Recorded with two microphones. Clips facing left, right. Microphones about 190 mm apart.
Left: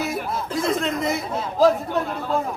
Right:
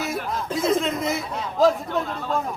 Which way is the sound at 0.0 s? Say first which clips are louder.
Left 1 dB; 5° left (ahead or behind).